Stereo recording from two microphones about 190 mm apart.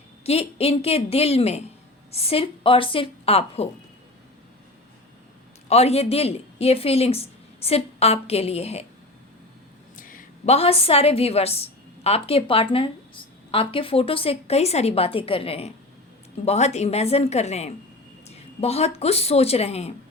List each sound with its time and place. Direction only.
0.3 s a woman's voice: 35° left (ahead or behind)
5.6 s a woman's voice: 35° left (ahead or behind)
9.9 s a woman's voice: 45° left (ahead or behind)